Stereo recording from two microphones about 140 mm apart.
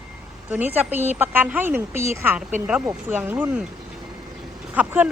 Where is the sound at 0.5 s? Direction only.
10° right (ahead or behind).